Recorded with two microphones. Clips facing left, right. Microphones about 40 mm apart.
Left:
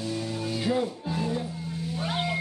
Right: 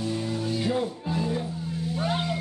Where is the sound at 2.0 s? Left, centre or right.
Centre.